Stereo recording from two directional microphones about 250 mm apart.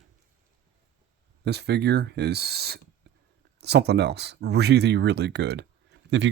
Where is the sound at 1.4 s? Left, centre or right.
Right.